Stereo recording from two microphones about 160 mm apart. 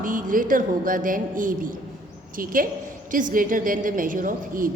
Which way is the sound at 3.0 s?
55° right (ahead or behind).